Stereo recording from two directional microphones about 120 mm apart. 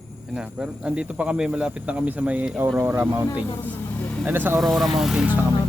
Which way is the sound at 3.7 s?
15° left (ahead or behind).